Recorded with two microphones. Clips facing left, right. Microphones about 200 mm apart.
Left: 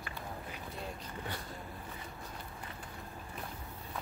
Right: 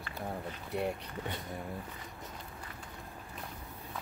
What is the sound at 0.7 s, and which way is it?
Speech, 65° right (ahead or behind).